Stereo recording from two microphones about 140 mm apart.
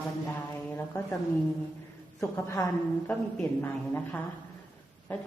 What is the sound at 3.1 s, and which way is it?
A woman's voice, 10° left (ahead or behind).